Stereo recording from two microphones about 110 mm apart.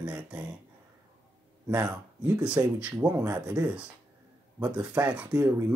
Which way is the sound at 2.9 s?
20° right (ahead or behind).